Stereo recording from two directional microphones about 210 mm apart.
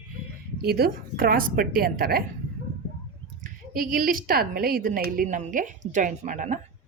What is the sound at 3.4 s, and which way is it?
A woman's voice, 40° right (ahead or behind).